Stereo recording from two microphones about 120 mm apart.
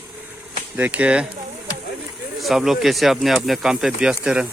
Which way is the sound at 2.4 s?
5° right (ahead or behind).